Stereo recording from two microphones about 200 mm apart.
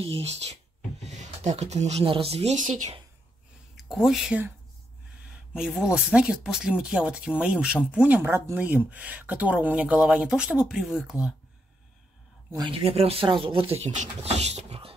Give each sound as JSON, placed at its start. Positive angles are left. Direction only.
{"t": 0.0, "sound": "speech", "side_deg": -30}
{"t": 3.7, "sound": "speech", "side_deg": 0}
{"t": 12.4, "sound": "speech", "side_deg": -20}